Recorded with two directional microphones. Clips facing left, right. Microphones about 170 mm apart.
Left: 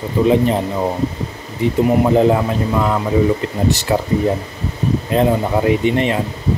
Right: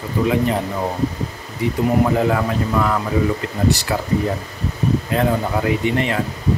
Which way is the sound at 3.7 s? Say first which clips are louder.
Left 1 dB; 20° left (ahead or behind).